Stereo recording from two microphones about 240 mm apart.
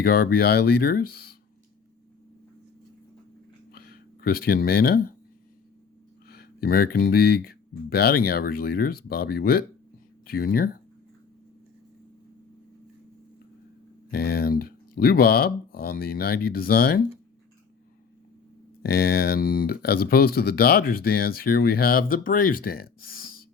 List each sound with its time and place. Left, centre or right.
0.0 s speech: left
3.7 s a sound: left
6.2 s speech: left
14.1 s speech: left
18.8 s speech: left